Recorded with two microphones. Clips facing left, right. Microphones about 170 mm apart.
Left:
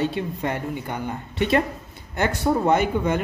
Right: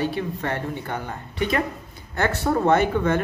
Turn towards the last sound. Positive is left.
turn(degrees=15)  # may be behind; listen again after turning